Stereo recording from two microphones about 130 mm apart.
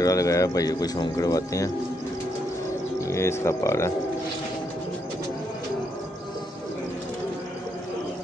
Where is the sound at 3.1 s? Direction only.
20° left (ahead or behind).